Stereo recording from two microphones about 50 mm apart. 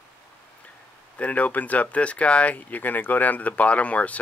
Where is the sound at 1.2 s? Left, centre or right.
Left.